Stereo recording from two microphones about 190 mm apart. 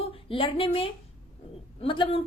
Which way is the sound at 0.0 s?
30° left (ahead or behind).